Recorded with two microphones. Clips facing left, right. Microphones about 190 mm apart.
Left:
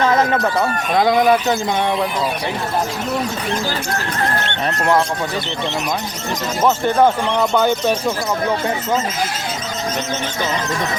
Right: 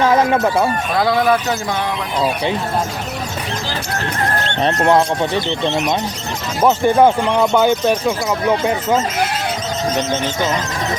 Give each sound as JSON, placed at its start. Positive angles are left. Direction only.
{"t": 0.0, "sound": "speech", "side_deg": -10}
{"t": 0.9, "sound": "speech", "side_deg": 20}
{"t": 4.6, "sound": "speech", "side_deg": -25}
{"t": 6.6, "sound": "speech", "side_deg": -15}